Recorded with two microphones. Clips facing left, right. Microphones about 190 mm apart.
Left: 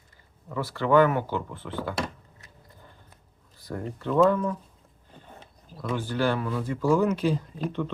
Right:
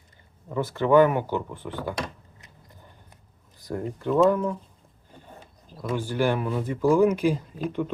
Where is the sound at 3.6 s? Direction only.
15° right (ahead or behind).